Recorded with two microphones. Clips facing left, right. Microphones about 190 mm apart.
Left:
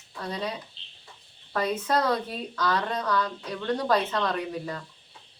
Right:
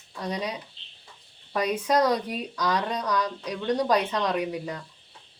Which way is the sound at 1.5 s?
15° right (ahead or behind).